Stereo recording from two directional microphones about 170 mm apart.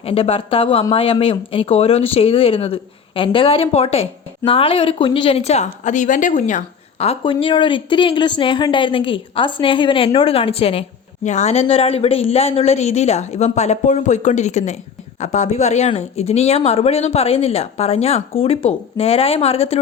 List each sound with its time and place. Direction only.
0.0 s a woman's voice: 35° left (ahead or behind)
7.0 s a woman's voice: 35° left (ahead or behind)